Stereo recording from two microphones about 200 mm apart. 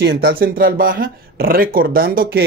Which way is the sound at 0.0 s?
55° right (ahead or behind).